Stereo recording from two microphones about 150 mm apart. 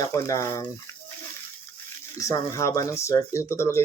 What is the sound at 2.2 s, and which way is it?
Speech, 20° left (ahead or behind).